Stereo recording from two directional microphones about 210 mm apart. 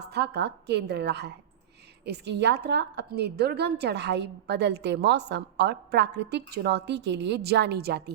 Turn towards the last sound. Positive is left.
turn(degrees=-50)  # may be behind; listen again after turning